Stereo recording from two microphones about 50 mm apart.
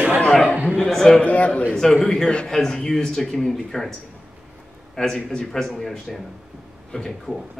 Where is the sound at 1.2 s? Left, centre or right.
Left.